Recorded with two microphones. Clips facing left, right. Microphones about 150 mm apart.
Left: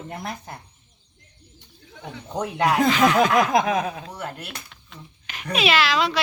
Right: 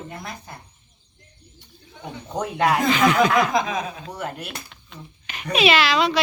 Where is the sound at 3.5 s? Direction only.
60° left (ahead or behind).